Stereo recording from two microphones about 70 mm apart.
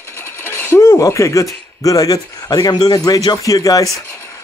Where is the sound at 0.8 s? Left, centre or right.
Left.